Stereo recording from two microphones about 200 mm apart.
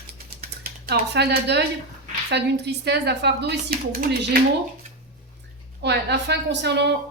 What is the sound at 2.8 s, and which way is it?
A woman's voice, 55° right (ahead or behind).